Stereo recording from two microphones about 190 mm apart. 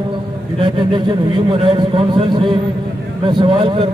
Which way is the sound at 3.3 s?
25° right (ahead or behind).